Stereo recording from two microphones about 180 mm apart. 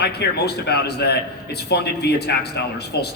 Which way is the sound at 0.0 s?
65° left (ahead or behind).